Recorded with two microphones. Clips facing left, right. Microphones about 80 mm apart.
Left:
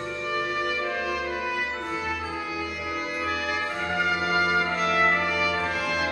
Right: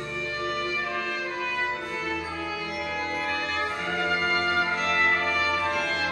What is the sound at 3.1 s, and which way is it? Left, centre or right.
Brass instrument, centre.